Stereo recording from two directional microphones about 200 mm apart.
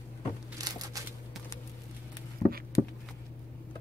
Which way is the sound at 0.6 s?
20° right (ahead or behind).